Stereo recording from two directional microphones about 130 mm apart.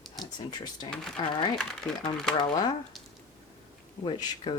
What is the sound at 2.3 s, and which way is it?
Speech, 35° left (ahead or behind).